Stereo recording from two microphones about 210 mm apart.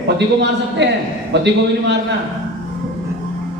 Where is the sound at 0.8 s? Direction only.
55° right (ahead or behind).